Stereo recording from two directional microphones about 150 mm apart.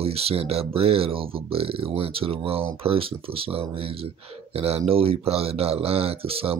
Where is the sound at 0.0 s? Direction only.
40° right (ahead or behind).